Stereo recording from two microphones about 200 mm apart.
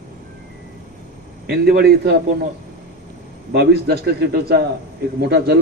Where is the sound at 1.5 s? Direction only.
55° right (ahead or behind).